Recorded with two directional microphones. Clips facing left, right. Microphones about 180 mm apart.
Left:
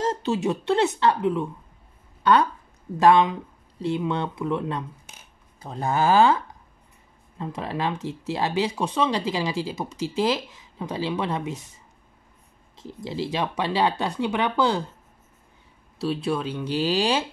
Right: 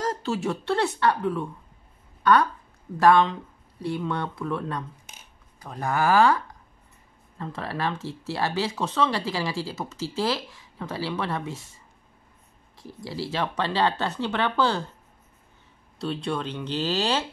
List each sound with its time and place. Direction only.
0.0 s speech: 20° left (ahead or behind)
3.0 s speech: 20° left (ahead or behind)
16.0 s speech: 5° left (ahead or behind)